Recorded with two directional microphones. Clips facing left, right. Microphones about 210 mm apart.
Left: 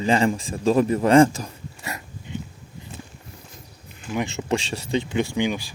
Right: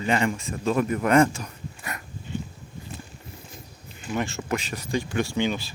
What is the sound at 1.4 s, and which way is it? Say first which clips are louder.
Dog: left 3 dB; 25° left (ahead or behind).